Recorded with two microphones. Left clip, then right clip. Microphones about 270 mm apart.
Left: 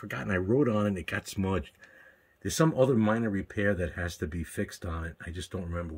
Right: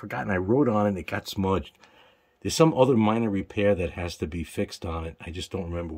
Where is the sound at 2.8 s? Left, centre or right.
Left.